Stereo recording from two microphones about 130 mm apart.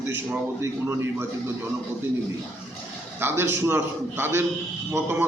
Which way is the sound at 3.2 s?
20° right (ahead or behind).